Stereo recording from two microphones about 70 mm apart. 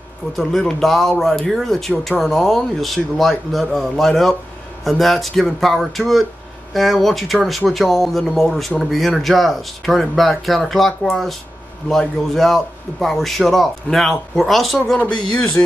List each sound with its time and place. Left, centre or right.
0.4 s speech: centre
15.0 s speech: centre